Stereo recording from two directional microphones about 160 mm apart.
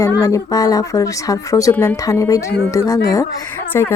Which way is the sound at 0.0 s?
20° left (ahead or behind).